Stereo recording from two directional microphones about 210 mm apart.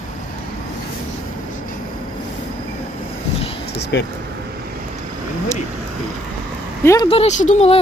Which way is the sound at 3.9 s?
55° left (ahead or behind).